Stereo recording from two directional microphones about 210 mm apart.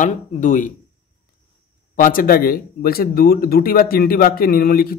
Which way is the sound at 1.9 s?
40° left (ahead or behind).